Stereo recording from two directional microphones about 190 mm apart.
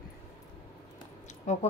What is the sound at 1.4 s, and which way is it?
Speech, 35° left (ahead or behind).